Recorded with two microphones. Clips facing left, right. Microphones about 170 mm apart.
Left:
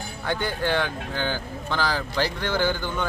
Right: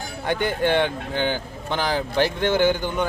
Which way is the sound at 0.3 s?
20° right (ahead or behind).